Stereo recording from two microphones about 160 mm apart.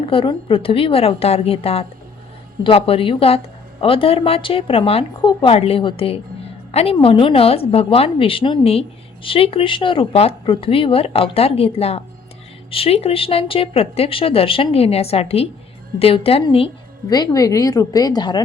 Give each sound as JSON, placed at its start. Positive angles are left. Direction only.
{"t": 0.1, "sound": "a woman's voice", "side_deg": 35}